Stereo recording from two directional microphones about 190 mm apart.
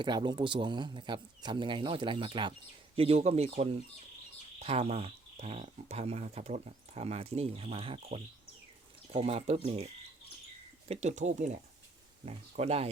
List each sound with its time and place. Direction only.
0.0 s speech: 25° right (ahead or behind)
10.8 s speech: 35° right (ahead or behind)